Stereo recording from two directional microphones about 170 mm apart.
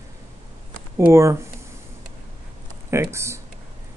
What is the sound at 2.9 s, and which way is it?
Speech, 15° right (ahead or behind).